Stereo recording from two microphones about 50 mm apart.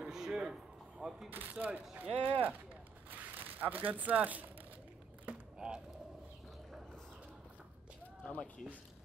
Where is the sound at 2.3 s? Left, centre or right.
Right.